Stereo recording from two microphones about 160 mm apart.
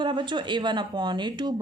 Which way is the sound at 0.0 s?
30° right (ahead or behind).